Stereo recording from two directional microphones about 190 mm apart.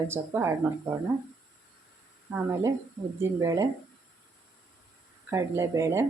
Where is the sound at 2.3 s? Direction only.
10° right (ahead or behind).